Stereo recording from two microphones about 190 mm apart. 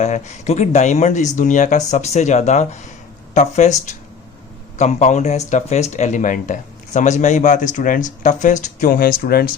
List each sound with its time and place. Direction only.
0.0 s speech: 35° left (ahead or behind)
4.8 s speech: 40° left (ahead or behind)